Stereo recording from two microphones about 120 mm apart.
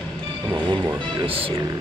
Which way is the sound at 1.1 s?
50° right (ahead or behind).